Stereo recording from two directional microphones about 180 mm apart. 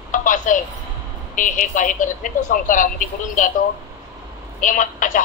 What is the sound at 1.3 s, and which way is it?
Speech, 45° left (ahead or behind).